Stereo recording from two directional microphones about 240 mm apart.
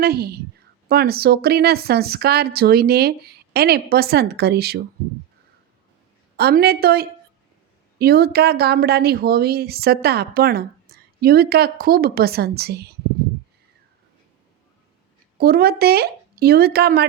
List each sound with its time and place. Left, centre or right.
0.0 s speech: right
6.3 s speech: right
15.4 s speech: right